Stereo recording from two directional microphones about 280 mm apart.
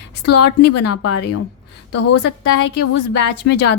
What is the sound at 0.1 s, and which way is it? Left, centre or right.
Speech, left.